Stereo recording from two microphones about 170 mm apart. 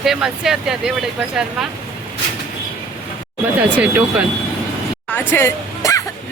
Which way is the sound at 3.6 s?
10° right (ahead or behind).